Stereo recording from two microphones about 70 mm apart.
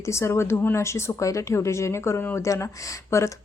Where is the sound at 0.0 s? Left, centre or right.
Left.